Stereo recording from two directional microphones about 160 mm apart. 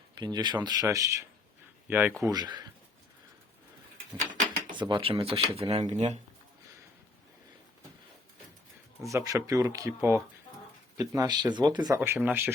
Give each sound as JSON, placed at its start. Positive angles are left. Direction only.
{"t": 0.2, "sound": "speech", "side_deg": -25}
{"t": 2.2, "sound": "speech", "side_deg": -25}
{"t": 4.7, "sound": "speech", "side_deg": -30}
{"t": 9.0, "sound": "speech", "side_deg": -20}
{"t": 11.9, "sound": "speech", "side_deg": -15}